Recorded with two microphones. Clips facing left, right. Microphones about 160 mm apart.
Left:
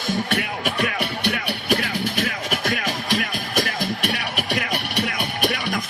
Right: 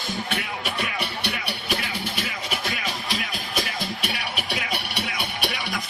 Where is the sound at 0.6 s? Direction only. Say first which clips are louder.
Left 5 dB; 50° left (ahead or behind).